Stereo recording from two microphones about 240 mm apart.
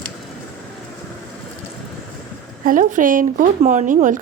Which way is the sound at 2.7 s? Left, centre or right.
Right.